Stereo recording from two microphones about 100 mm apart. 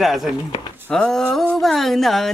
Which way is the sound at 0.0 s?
Centre (ahead or behind).